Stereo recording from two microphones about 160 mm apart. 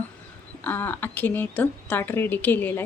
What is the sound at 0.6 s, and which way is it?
A woman's voice, 10° left (ahead or behind).